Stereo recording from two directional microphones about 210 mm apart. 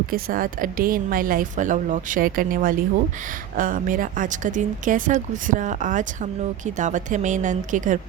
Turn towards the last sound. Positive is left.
turn(degrees=-35)  # may be behind; listen again after turning